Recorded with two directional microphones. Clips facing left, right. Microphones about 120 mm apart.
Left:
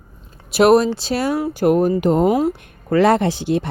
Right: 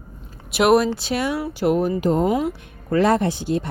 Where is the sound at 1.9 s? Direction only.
60° left (ahead or behind).